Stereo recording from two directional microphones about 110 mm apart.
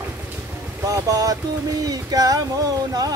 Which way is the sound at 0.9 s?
30° right (ahead or behind).